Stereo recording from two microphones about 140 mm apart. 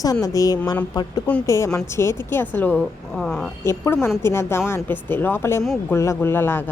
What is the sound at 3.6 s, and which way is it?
A woman's voice, 20° left (ahead or behind).